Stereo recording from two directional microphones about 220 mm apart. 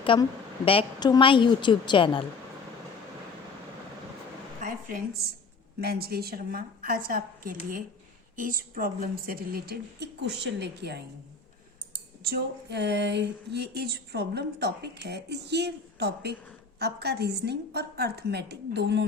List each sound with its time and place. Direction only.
0.0 s a woman's voice: 25° left (ahead or behind)
4.6 s a sound: 35° right (ahead or behind)
5.8 s speech: 45° right (ahead or behind)
12.2 s speech: 50° right (ahead or behind)